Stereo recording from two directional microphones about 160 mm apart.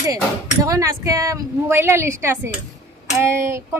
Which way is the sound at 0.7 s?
20° right (ahead or behind).